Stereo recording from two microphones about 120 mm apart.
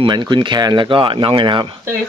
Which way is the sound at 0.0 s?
40° right (ahead or behind).